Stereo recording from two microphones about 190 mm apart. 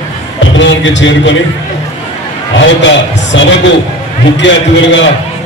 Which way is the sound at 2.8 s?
75° left (ahead or behind).